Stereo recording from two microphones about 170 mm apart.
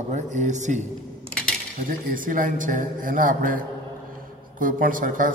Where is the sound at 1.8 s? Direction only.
55° right (ahead or behind).